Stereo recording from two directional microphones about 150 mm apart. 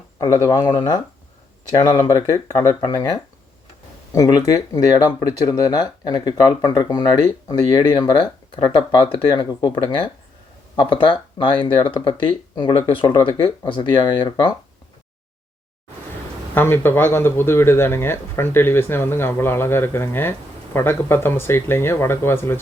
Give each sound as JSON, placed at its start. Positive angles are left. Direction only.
{"t": 0.3, "sound": "speech", "side_deg": 20}
{"t": 16.6, "sound": "speech", "side_deg": 15}